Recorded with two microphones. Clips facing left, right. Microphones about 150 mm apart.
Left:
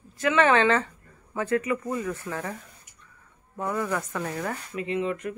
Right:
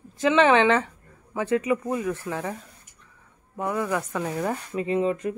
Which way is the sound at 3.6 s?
10° right (ahead or behind).